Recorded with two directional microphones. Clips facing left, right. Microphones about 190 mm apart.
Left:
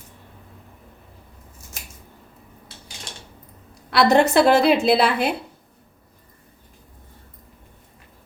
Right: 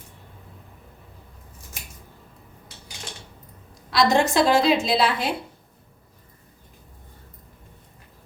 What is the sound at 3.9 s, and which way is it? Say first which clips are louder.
A woman's voice: left 4 dB; 65° left (ahead or behind).